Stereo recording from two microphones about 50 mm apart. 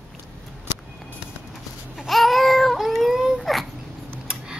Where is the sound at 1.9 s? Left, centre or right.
Centre.